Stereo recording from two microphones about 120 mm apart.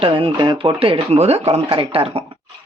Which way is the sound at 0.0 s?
45° right (ahead or behind).